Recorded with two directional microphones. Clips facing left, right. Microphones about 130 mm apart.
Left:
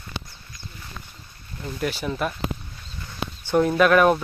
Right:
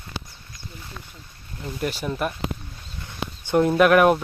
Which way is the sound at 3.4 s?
15° right (ahead or behind).